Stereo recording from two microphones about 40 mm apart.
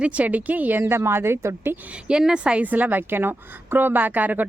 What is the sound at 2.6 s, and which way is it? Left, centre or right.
A woman's voice, right.